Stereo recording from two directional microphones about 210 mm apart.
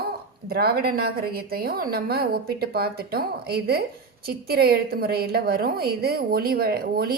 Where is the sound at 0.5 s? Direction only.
45° right (ahead or behind).